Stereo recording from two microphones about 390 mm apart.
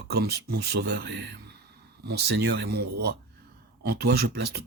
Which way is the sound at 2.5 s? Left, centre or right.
Right.